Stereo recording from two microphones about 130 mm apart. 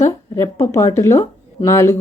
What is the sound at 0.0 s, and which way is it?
Speech, 20° left (ahead or behind).